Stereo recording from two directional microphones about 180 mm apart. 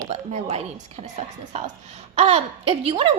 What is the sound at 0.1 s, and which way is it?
A woman's voice, 40° right (ahead or behind).